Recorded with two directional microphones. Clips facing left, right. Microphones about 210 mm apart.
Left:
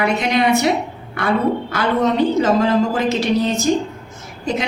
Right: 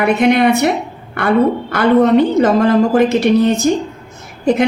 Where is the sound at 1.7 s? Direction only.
55° right (ahead or behind).